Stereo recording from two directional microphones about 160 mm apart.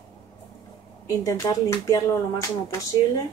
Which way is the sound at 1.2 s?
20° left (ahead or behind).